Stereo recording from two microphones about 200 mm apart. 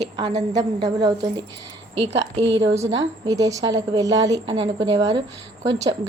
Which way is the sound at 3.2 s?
15° right (ahead or behind).